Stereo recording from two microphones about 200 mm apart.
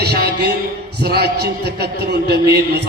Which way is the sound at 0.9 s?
50° right (ahead or behind).